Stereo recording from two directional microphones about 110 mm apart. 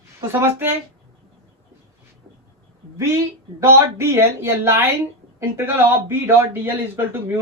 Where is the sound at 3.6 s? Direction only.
25° right (ahead or behind).